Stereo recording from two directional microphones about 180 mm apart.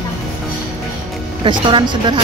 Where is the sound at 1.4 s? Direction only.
25° right (ahead or behind).